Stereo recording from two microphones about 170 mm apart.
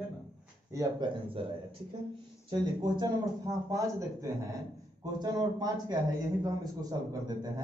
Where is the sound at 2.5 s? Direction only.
25° right (ahead or behind).